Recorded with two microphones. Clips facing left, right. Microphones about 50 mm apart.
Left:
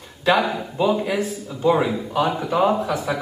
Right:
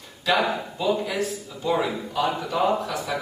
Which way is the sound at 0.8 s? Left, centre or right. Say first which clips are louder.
Left 5 dB; centre.